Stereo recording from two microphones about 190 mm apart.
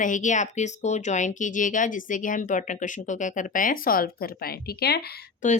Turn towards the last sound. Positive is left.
turn(degrees=55)  # may be behind; listen again after turning